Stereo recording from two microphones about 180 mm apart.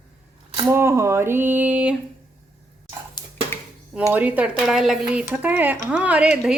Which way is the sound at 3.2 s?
25° left (ahead or behind).